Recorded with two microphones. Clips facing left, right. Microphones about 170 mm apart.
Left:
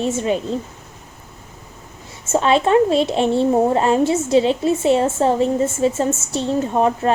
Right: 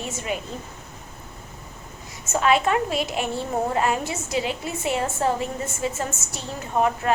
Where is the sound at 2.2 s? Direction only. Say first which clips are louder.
Left 4 dB; 30° left (ahead or behind).